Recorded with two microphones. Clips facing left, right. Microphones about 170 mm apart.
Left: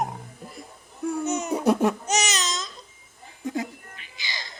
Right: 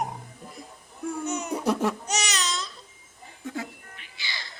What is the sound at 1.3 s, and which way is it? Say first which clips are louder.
Laughter: left 3 dB; 20° left (ahead or behind).